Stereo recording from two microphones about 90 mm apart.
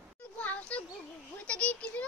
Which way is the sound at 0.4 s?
15° left (ahead or behind).